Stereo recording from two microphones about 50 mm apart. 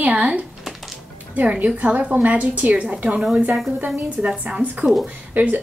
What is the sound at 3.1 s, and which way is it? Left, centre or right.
Speech, centre.